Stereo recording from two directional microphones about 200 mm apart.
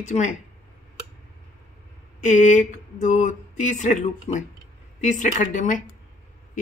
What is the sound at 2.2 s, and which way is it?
A woman's voice, 40° left (ahead or behind).